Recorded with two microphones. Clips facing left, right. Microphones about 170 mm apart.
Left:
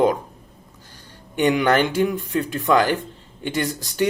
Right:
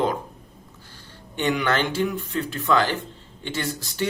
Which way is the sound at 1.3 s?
15° left (ahead or behind).